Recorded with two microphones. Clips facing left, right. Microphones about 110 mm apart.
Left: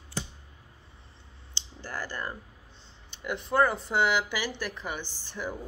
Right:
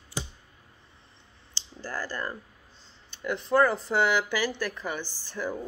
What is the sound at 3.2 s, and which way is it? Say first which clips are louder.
Speech: right 2 dB; 15° left (ahead or behind).